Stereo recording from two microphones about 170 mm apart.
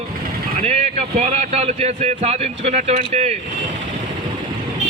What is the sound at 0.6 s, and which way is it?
A man's voice, 40° right (ahead or behind).